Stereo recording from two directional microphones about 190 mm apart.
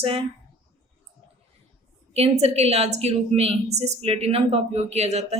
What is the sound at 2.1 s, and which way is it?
A woman's voice, 35° right (ahead or behind).